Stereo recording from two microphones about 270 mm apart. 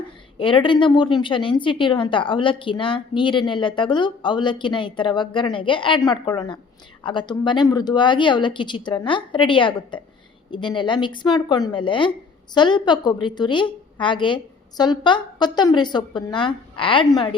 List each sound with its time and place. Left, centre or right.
0.3 s a woman's voice: centre